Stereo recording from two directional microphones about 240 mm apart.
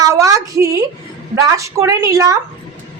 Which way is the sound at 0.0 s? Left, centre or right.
Centre.